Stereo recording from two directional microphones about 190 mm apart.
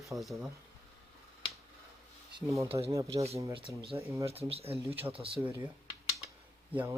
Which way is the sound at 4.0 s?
15° right (ahead or behind).